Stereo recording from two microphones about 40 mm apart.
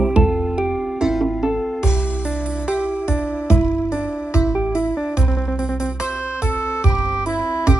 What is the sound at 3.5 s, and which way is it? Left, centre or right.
Music, right.